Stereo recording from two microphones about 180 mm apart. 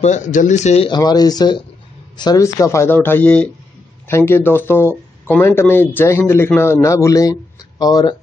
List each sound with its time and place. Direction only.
0.0 s speech: 40° left (ahead or behind)
0.8 s speech: 20° left (ahead or behind)